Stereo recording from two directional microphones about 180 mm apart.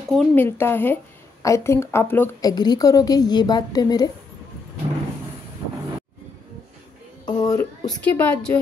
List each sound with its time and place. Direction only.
0.1 s a woman's voice: 10° left (ahead or behind)
2.5 s a woman's voice: 20° left (ahead or behind)
7.2 s speech: 20° left (ahead or behind)
7.9 s a woman's voice: 10° left (ahead or behind)